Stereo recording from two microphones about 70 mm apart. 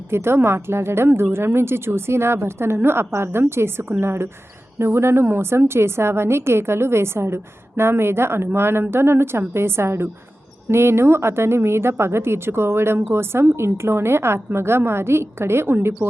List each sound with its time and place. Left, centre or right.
0.1 s a woman's voice: right